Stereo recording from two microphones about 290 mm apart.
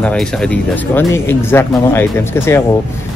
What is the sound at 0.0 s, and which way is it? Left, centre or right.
Speech, centre.